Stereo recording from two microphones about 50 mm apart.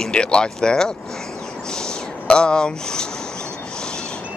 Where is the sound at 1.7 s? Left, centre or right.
Centre.